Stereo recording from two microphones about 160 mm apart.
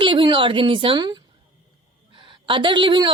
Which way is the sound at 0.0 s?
30° right (ahead or behind).